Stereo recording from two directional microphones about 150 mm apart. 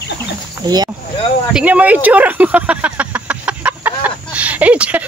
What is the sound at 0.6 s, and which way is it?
Speech, 30° right (ahead or behind).